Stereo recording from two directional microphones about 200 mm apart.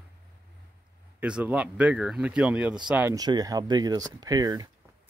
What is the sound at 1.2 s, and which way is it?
Speech, 5° right (ahead or behind).